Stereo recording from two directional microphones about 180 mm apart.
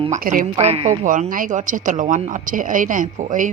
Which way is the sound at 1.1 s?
50° right (ahead or behind).